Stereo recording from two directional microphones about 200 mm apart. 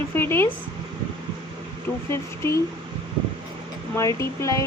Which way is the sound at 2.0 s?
15° left (ahead or behind).